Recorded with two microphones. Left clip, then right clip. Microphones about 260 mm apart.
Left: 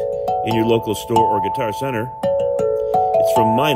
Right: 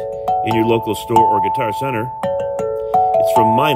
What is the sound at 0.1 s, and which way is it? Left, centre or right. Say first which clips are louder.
Speech: right 2 dB; right.